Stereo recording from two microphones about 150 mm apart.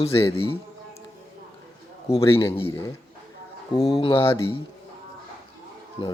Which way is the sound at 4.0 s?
35° left (ahead or behind).